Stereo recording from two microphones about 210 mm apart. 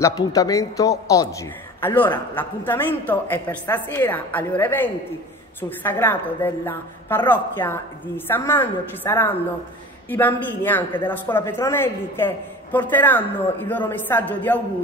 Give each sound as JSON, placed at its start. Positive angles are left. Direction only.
{"t": 0.0, "sound": "a woman's voice", "side_deg": 15}